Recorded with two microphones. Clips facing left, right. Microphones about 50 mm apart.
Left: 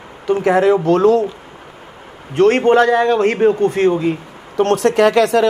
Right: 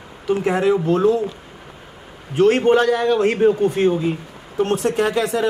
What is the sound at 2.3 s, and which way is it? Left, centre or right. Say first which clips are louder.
A man's voice: left 3 dB; left.